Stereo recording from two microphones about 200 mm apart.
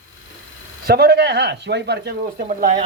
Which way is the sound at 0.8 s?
55° right (ahead or behind).